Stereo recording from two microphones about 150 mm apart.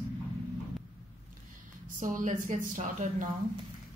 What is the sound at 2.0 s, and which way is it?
Speech, 60° right (ahead or behind).